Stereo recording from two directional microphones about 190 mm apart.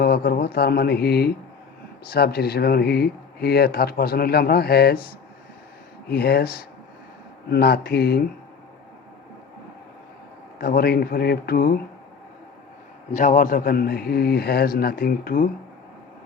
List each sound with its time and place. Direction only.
0.0 s speech: 55° left (ahead or behind)
6.1 s speech: 55° left (ahead or behind)
10.6 s a man's voice: 55° left (ahead or behind)
13.1 s a man's voice: 40° left (ahead or behind)